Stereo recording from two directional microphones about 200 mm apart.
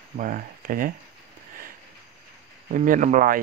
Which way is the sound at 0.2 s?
45° right (ahead or behind).